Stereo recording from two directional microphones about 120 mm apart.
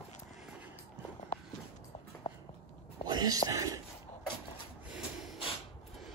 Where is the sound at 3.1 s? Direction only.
35° right (ahead or behind).